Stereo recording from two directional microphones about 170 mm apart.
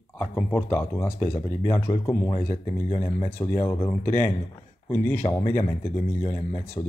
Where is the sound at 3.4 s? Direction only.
15° left (ahead or behind).